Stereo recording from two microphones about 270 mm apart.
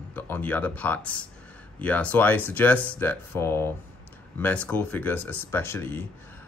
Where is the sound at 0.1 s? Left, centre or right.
Centre.